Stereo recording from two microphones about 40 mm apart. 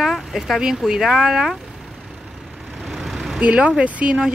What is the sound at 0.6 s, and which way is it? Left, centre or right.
Speech, centre.